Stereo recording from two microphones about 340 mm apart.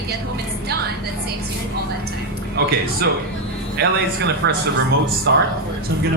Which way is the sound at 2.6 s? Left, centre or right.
Right.